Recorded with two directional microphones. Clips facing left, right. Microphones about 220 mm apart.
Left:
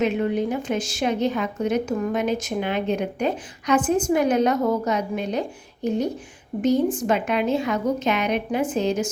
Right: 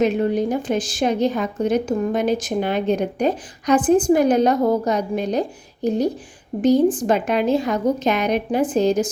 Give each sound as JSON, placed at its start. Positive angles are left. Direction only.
{"t": 0.0, "sound": "a woman's voice", "side_deg": -35}